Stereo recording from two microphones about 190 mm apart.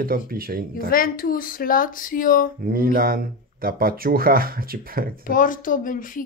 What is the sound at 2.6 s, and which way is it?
Speech, 50° right (ahead or behind).